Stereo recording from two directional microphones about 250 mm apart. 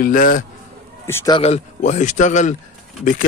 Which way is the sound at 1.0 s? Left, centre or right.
Centre.